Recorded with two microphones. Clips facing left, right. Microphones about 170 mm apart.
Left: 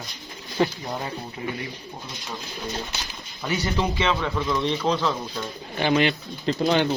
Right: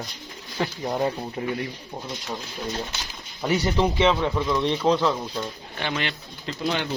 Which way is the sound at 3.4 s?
25° right (ahead or behind).